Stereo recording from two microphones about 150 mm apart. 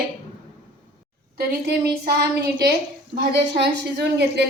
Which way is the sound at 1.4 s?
90° right.